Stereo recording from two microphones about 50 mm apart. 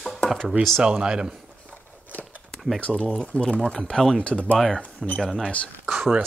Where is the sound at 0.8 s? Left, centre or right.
Centre.